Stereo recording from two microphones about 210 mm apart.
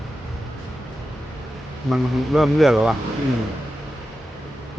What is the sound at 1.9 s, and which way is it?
Speech, centre (ahead or behind).